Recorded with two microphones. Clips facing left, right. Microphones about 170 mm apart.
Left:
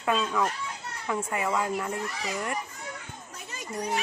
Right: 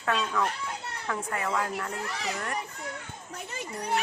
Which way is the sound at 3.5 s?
60° right (ahead or behind).